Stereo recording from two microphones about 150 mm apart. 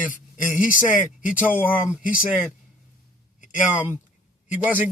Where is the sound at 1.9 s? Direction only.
5° right (ahead or behind).